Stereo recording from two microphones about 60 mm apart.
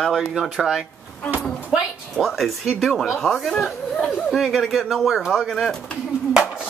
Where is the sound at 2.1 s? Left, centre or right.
Centre.